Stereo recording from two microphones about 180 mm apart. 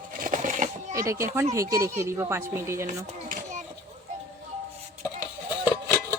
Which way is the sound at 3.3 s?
45° right (ahead or behind).